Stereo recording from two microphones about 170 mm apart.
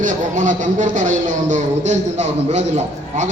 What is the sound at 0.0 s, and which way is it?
Speech, 50° right (ahead or behind).